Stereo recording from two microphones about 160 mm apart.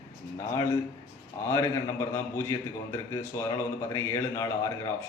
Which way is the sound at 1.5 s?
15° left (ahead or behind).